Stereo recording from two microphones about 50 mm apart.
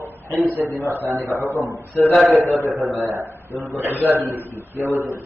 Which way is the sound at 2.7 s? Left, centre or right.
Centre.